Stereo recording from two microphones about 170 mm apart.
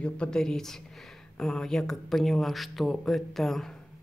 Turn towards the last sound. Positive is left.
turn(degrees=0)  # may be behind; listen again after turning